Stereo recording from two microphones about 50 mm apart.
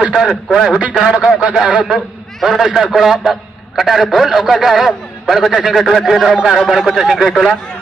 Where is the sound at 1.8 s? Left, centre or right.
Centre.